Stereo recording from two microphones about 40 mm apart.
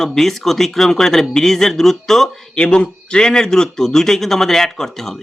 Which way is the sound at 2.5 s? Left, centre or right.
Left.